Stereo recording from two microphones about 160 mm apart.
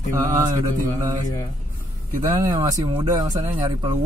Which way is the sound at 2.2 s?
20° right (ahead or behind).